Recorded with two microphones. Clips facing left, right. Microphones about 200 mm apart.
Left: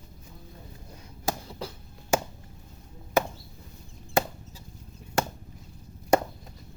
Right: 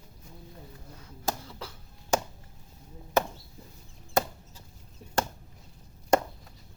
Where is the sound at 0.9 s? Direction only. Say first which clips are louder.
Left 2 dB; 15° left (ahead or behind).